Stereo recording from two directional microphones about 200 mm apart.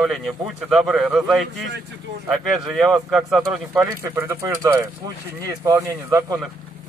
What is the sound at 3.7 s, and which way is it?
Speech, 15° right (ahead or behind).